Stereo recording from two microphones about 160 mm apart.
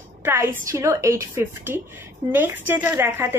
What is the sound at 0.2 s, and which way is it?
A woman's voice, 15° right (ahead or behind).